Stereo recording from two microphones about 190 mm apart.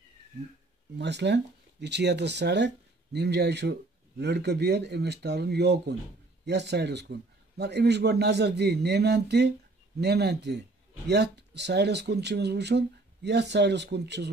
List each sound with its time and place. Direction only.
0.9 s speech: 65° right (ahead or behind)